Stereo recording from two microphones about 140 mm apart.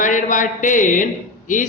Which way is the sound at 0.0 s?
65° left (ahead or behind).